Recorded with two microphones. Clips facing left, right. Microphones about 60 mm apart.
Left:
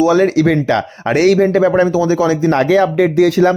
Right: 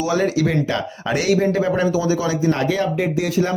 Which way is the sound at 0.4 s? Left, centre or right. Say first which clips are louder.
Left 7 dB; left.